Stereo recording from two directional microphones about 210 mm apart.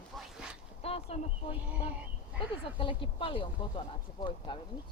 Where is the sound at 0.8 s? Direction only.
30° left (ahead or behind).